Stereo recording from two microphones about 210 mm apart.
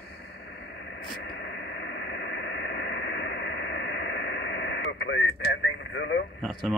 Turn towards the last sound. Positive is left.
turn(degrees=5)  # may be behind; listen again after turning